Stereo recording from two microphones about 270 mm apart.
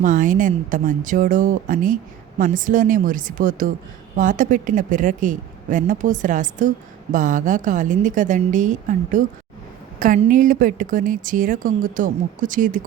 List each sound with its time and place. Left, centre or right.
0.0 s speech: right